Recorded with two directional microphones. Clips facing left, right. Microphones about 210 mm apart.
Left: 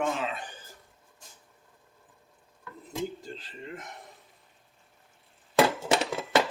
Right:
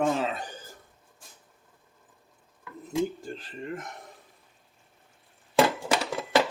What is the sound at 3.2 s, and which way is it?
Speech, 50° right (ahead or behind).